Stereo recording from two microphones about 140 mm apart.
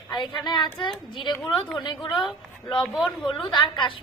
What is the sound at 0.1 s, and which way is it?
A woman's voice, 30° left (ahead or behind).